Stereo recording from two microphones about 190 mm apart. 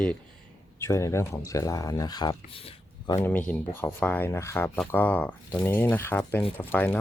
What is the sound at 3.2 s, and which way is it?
Speech, 10° left (ahead or behind).